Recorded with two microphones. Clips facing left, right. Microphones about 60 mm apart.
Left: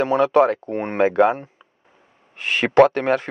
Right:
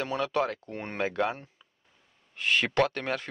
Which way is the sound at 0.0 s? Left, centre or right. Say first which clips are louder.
Left 13 dB; left.